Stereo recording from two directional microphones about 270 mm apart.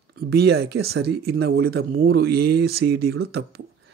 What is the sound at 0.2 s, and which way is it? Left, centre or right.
Speech, right.